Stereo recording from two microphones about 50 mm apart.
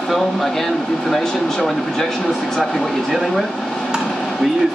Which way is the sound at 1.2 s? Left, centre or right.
Centre.